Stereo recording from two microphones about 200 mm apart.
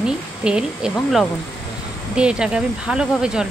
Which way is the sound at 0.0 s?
5° right (ahead or behind).